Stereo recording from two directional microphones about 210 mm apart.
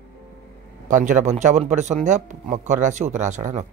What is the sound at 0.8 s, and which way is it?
Speech, 35° right (ahead or behind).